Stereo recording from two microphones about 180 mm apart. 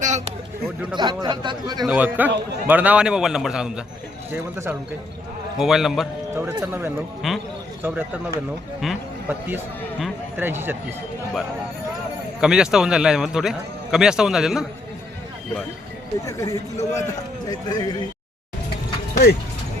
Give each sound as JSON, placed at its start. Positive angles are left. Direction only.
{"t": 0.9, "sound": "speech", "side_deg": -25}
{"t": 1.9, "sound": "a man's voice", "side_deg": -10}
{"t": 5.5, "sound": "a man's voice", "side_deg": 0}
{"t": 6.3, "sound": "speech", "side_deg": -10}
{"t": 7.2, "sound": "a man's voice", "side_deg": 0}
{"t": 7.8, "sound": "speech", "side_deg": -15}
{"t": 10.0, "sound": "speech", "side_deg": -10}
{"t": 12.4, "sound": "a man's voice", "side_deg": -5}
{"t": 16.2, "sound": "speech", "side_deg": 15}
{"t": 19.1, "sound": "speech", "side_deg": 55}